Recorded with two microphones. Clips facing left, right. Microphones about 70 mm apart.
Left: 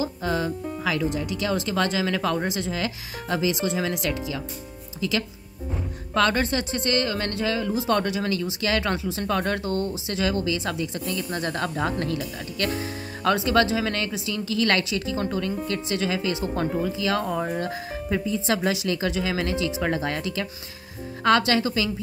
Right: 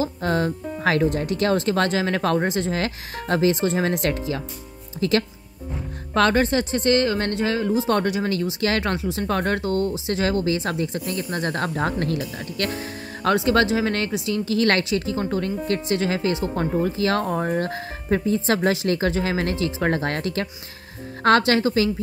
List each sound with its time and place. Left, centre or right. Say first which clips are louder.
0.2 s speech: right 3 dB; right
6.1 s speech: right 3 dB; right
9.3 s speech: right 2 dB; right
9.6 s speech: right 4 dB; left
10.0 s speech: right 3 dB; right
13.2 s speech: right 2 dB; right
21.4 s speech: right 4 dB; right